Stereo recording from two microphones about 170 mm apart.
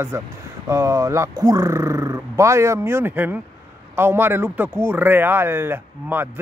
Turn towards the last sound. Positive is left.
turn(degrees=-10)  # may be behind; listen again after turning